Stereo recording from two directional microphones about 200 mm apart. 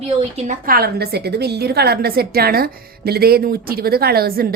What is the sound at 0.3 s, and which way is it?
A woman's voice, 40° right (ahead or behind).